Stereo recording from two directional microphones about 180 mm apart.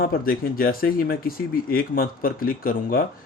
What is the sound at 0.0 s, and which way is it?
Speech, 55° left (ahead or behind).